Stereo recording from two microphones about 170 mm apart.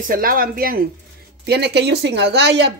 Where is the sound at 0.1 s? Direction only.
55° right (ahead or behind).